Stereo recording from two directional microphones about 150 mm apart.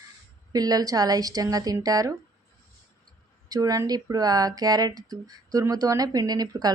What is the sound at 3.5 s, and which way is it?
Speech, 25° right (ahead or behind).